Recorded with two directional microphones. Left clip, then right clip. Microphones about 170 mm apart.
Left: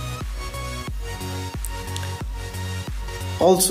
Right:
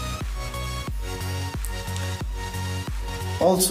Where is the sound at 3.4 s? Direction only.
35° left (ahead or behind).